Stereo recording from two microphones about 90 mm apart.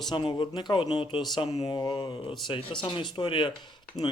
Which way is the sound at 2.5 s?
75° left (ahead or behind).